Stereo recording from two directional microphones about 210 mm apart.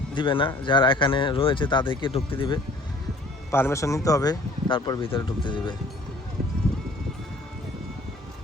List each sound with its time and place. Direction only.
0.1 s speech: 25° left (ahead or behind)
3.5 s speech: 10° left (ahead or behind)